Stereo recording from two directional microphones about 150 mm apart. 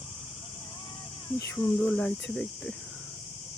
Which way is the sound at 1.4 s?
25° left (ahead or behind).